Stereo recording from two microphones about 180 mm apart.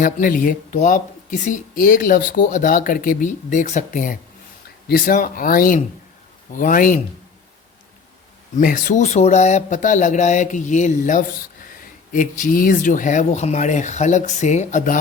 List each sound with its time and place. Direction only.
0.0 s speech: 50° left (ahead or behind)
8.6 s speech: 45° left (ahead or behind)